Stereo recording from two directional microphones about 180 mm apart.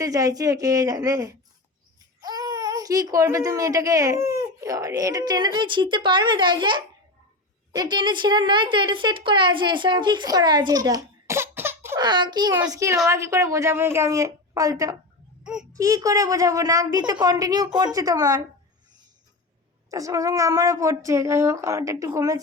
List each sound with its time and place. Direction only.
0.0 s speech: 20° right (ahead or behind)
12.0 s speech: 25° right (ahead or behind)
19.9 s speech: 20° right (ahead or behind)